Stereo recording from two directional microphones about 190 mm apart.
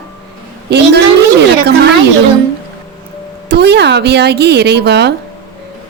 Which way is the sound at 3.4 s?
60° right (ahead or behind).